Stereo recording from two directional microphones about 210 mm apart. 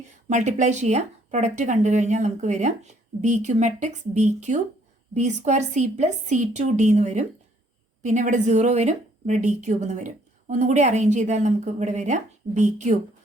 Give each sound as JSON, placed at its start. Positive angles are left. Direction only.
{"t": 0.1, "sound": "speech", "side_deg": -35}